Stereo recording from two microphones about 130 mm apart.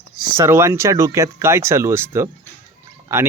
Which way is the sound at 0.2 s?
20° right (ahead or behind).